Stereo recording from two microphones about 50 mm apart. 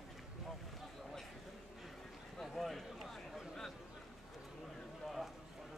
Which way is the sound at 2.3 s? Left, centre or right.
Centre.